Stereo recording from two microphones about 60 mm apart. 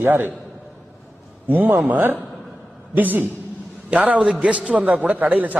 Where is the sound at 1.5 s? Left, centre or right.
Right.